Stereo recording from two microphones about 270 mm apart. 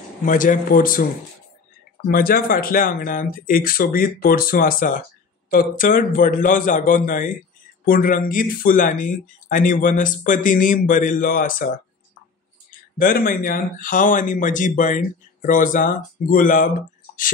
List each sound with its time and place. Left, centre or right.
0.2 s speech: left
2.0 s speech: left
13.0 s speech: left